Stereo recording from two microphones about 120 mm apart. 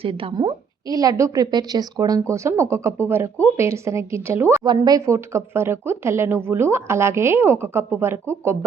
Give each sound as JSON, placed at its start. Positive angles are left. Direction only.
{"t": 0.0, "sound": "a woman's voice", "side_deg": -50}
{"t": 0.9, "sound": "speech", "side_deg": -30}